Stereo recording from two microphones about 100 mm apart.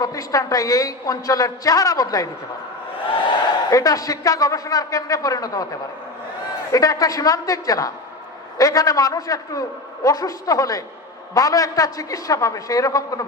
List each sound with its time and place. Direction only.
0.0 s a man's voice: 35° left (ahead or behind)
3.7 s a man's voice: 35° left (ahead or behind)
6.7 s a man's voice: 35° left (ahead or behind)